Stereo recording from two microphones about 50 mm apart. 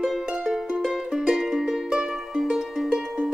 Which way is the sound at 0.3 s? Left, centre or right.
Centre.